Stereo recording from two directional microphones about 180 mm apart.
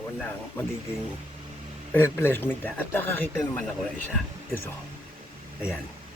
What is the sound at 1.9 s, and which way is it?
Speech, 10° left (ahead or behind).